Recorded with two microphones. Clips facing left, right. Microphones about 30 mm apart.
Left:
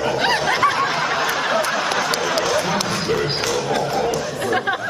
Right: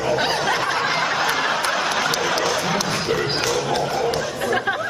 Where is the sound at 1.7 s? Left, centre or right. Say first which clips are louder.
Left 1 dB; centre.